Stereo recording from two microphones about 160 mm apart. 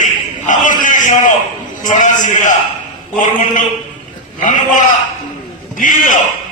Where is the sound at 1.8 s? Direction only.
50° left (ahead or behind).